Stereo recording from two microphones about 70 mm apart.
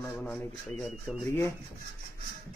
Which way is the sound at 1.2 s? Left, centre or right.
Left.